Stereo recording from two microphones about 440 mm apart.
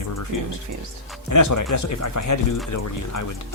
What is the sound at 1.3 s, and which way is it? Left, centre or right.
Speech, left.